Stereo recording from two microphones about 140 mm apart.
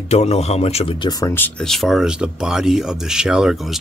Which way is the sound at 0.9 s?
25° left (ahead or behind).